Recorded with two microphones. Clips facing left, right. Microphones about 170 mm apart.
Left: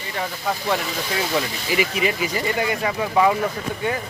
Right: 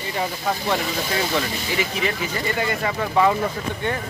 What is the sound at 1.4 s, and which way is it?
Speech, 10° left (ahead or behind).